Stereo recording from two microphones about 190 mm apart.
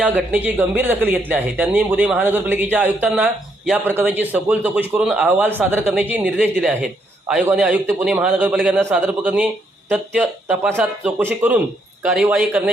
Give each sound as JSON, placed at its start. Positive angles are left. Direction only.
{"t": 0.0, "sound": "speech", "side_deg": -10}